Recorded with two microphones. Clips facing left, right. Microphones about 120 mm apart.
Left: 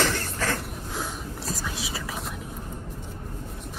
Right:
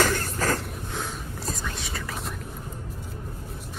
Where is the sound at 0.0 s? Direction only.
45° right (ahead or behind).